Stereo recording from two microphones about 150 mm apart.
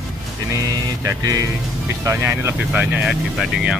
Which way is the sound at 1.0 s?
20° right (ahead or behind).